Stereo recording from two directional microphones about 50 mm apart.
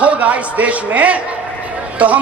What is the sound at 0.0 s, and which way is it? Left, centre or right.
A man's voice, right.